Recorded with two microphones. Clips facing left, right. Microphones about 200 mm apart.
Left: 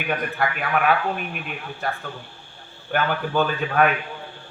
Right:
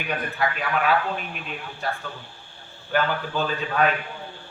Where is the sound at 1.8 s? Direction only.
55° left (ahead or behind).